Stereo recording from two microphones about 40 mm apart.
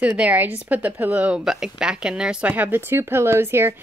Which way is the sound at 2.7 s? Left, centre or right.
Right.